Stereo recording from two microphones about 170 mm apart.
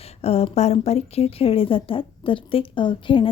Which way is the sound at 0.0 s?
40° left (ahead or behind).